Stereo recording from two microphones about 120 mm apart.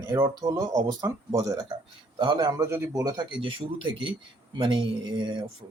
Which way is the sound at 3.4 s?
45° right (ahead or behind).